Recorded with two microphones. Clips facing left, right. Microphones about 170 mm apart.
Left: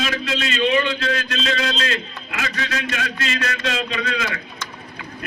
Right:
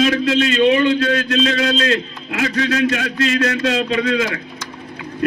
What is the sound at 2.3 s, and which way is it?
A man's voice, 45° right (ahead or behind).